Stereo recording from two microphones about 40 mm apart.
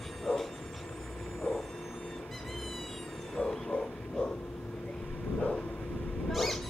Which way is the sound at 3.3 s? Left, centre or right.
Centre.